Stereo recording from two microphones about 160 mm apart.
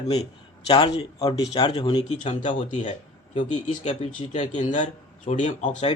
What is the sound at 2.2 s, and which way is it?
Speech, 50° left (ahead or behind).